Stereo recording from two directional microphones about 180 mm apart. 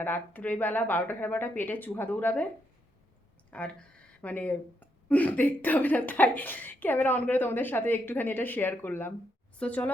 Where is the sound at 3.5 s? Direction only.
5° left (ahead or behind).